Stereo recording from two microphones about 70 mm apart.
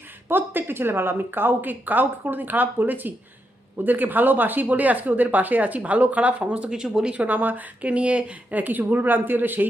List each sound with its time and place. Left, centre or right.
0.3 s speech: right